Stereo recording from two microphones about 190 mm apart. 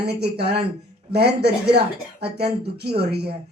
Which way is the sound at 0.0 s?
60° right (ahead or behind).